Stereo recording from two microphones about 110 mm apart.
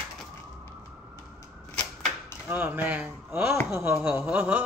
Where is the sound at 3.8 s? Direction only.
20° right (ahead or behind).